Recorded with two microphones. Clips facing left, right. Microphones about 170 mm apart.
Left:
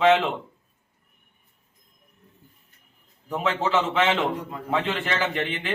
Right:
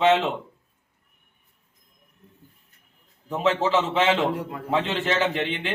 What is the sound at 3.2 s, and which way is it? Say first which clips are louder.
A man's voice: right 3 dB; 25° right (ahead or behind).